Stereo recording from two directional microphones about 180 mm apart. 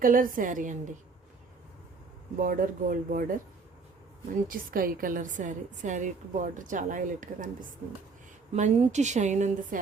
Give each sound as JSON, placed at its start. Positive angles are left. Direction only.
{"t": 0.0, "sound": "a woman's voice", "side_deg": -50}
{"t": 2.4, "sound": "a woman's voice", "side_deg": -50}
{"t": 8.5, "sound": "a woman's voice", "side_deg": -40}